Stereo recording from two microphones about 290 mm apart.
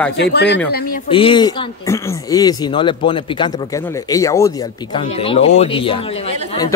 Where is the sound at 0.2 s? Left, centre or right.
Left.